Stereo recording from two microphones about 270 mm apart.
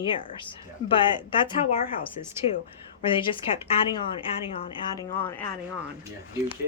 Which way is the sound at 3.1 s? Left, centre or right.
Centre.